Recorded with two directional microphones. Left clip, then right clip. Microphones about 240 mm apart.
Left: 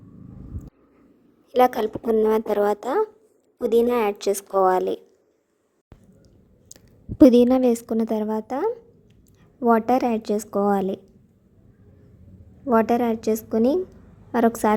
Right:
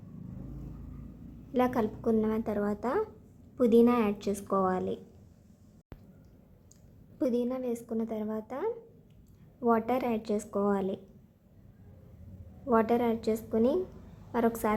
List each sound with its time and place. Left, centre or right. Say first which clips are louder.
1.5 s a woman's voice: left 10 dB; left
7.2 s a woman's voice: left 16 dB; left
12.6 s a woman's voice: left 7 dB; left